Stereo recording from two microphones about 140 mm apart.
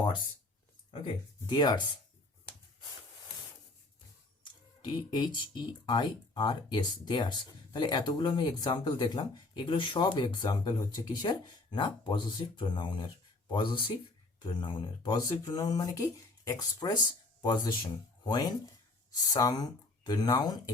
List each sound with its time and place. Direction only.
0.9 s speech: 35° left (ahead or behind)
4.4 s speech: 30° left (ahead or behind)